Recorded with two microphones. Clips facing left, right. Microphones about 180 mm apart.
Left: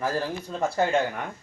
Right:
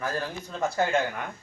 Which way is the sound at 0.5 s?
30° left (ahead or behind).